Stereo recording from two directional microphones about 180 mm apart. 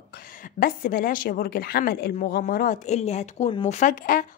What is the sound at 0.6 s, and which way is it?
A woman's voice, 50° left (ahead or behind).